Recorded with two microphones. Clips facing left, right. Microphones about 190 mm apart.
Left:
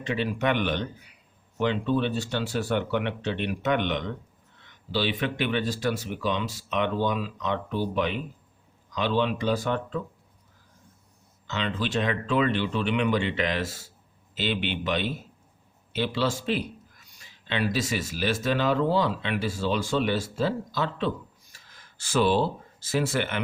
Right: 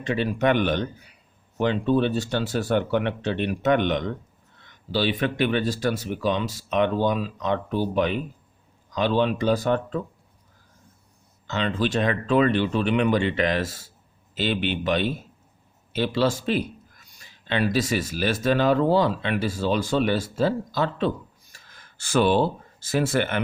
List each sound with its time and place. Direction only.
0.0 s speech: 45° right (ahead or behind)
11.4 s speech: 45° right (ahead or behind)
21.5 s a sound: 55° right (ahead or behind)